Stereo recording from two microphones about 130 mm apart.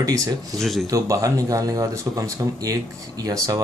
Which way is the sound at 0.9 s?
25° right (ahead or behind).